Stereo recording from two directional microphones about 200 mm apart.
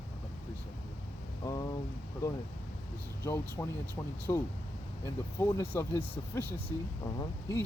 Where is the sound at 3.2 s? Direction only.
10° left (ahead or behind).